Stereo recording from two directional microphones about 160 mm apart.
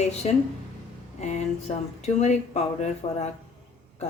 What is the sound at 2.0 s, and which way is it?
Speech, 45° left (ahead or behind).